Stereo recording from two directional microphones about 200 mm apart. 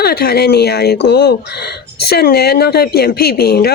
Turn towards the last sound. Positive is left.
turn(degrees=50)  # may be behind; listen again after turning